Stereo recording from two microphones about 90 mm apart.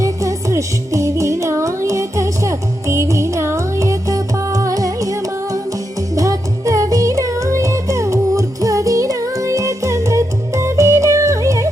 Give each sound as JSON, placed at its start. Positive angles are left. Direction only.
{"t": 0.0, "sound": "music", "side_deg": -35}